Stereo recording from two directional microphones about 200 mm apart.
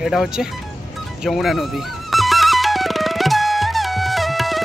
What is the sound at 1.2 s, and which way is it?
Music, centre (ahead or behind).